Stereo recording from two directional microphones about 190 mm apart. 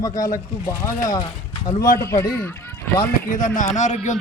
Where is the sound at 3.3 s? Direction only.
45° left (ahead or behind).